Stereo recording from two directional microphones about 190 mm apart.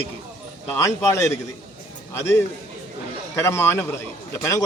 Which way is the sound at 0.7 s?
15° left (ahead or behind).